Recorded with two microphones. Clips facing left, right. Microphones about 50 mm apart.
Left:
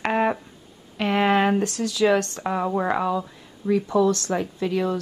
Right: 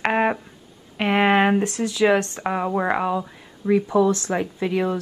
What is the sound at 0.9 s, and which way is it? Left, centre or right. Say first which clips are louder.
Speech: right 2 dB; right.